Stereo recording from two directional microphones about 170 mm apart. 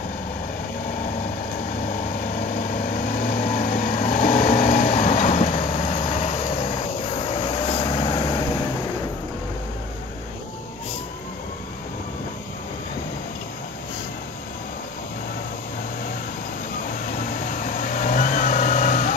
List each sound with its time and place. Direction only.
2.5 s vehicle: 55° left (ahead or behind); by 8.5 s 25° left (ahead or behind)
17.3 s vehicle: 55° left (ahead or behind)